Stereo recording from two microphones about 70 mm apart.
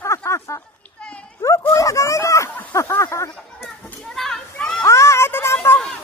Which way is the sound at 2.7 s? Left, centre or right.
Left.